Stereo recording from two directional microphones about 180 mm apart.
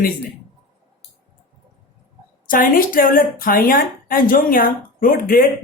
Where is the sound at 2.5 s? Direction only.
50° left (ahead or behind).